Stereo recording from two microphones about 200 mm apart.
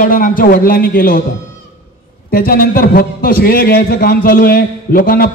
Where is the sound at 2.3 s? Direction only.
45° left (ahead or behind).